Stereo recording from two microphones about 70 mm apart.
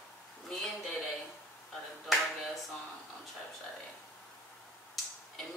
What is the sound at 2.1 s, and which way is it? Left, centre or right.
Speech, centre.